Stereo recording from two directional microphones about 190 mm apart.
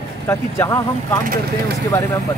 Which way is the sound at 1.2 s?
50° right (ahead or behind).